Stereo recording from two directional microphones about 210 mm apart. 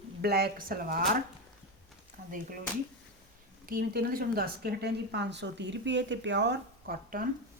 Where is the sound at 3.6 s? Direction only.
45° right (ahead or behind).